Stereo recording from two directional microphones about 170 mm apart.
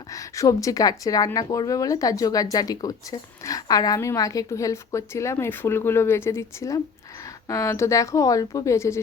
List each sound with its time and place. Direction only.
0.1 s a woman's voice: 20° left (ahead or behind)